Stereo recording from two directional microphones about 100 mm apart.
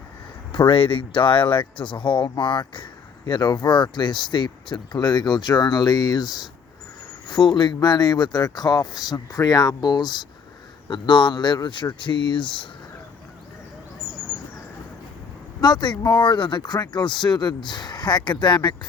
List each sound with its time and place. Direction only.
0.5 s speech: 55° left (ahead or behind)
15.6 s speech: 45° left (ahead or behind)